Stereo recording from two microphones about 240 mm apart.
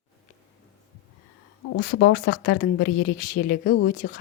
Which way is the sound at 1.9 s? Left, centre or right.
Left.